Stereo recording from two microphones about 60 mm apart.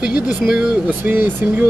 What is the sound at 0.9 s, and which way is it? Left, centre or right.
Speech, right.